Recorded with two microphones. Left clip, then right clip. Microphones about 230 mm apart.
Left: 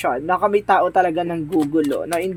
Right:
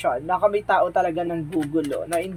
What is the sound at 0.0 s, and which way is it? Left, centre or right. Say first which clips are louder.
Speech: left 2 dB; left.